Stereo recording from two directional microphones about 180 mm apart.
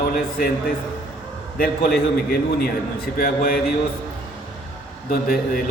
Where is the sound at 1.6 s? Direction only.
55° left (ahead or behind).